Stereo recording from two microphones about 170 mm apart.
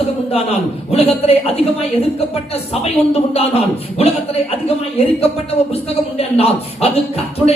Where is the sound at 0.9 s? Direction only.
35° left (ahead or behind).